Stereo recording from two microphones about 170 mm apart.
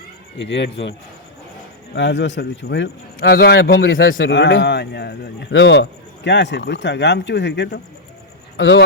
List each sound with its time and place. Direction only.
0.3 s a man's voice: 90° left
2.0 s a man's voice: 90° left